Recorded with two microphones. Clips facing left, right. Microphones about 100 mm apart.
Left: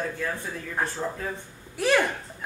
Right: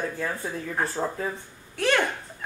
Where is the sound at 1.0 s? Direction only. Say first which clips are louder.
Right 2 dB; 25° right (ahead or behind).